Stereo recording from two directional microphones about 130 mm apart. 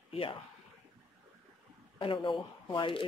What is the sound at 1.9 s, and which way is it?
Speech, 40° left (ahead or behind).